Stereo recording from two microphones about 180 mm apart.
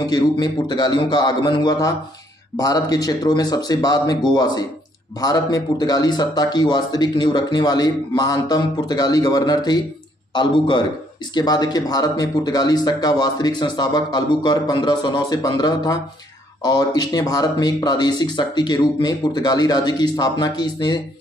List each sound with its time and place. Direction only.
0.0 s speech: 25° left (ahead or behind)